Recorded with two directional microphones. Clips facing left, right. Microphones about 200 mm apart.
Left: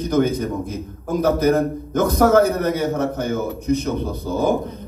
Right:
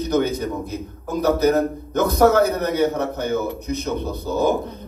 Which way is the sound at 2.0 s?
50° left (ahead or behind).